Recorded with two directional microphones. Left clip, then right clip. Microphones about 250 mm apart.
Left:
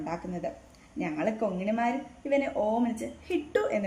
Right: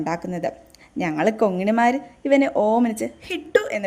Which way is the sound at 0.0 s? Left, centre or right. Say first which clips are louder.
Right 9 dB; right.